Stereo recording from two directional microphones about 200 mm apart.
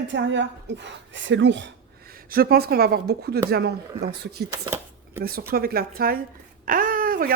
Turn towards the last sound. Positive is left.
turn(degrees=-45)  # may be behind; listen again after turning